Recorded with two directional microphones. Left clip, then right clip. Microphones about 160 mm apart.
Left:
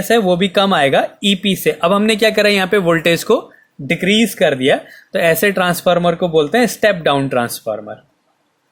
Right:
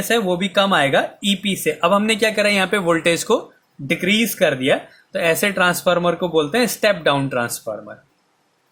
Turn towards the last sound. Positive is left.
turn(degrees=40)  # may be behind; listen again after turning